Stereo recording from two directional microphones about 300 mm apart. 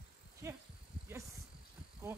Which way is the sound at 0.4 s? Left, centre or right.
Centre.